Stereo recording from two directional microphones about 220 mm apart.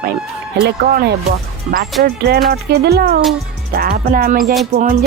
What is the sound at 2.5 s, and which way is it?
Speech, 45° right (ahead or behind).